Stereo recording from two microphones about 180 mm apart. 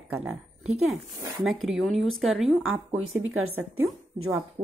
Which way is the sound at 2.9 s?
90° right.